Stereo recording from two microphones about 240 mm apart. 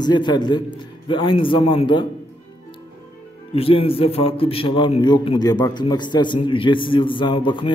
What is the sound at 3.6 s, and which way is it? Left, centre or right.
A man's voice, left.